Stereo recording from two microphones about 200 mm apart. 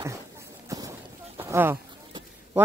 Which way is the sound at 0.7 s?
15° right (ahead or behind).